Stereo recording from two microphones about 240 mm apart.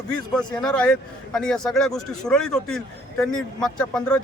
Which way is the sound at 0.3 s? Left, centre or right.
Centre.